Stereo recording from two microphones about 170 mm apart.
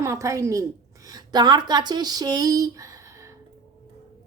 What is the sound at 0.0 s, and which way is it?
A woman's voice, 20° right (ahead or behind).